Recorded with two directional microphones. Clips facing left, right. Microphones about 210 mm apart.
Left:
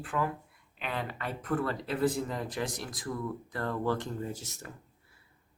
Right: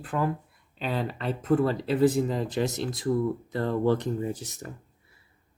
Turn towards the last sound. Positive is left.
turn(degrees=-15)  # may be behind; listen again after turning